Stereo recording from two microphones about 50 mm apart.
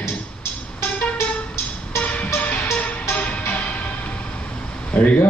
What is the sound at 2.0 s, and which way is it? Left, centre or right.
Music, left.